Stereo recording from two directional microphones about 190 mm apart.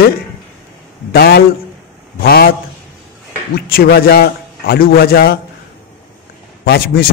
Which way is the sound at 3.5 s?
50° left (ahead or behind).